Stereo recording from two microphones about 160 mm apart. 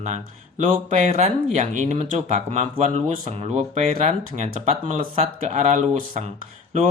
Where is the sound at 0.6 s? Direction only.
50° right (ahead or behind).